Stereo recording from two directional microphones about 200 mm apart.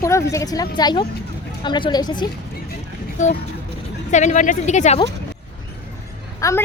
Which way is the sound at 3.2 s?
40° left (ahead or behind).